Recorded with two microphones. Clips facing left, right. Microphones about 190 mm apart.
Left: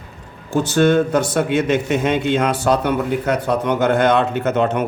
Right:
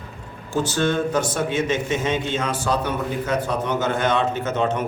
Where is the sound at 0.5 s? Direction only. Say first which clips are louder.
Left 7 dB; 60° left (ahead or behind).